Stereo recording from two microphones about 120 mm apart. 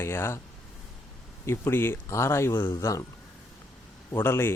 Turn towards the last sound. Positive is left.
turn(degrees=20)  # may be behind; listen again after turning